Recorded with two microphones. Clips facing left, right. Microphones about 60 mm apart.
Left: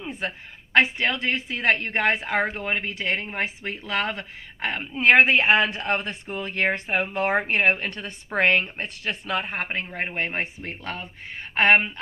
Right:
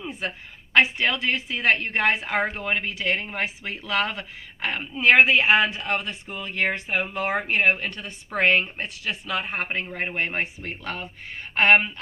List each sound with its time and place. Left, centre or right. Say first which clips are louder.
0.8 s a woman's voice: right 1 dB; left
9.7 s speech: right 1 dB; left